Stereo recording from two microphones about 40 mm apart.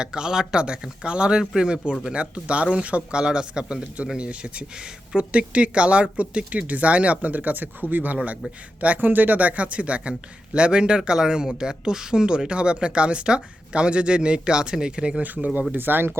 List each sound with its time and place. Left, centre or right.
0.0 s speech: centre
15.7 s speech: right